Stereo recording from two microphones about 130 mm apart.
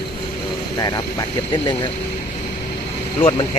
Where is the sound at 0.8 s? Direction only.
30° left (ahead or behind).